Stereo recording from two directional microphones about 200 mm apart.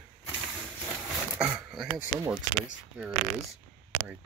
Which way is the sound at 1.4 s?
5° right (ahead or behind).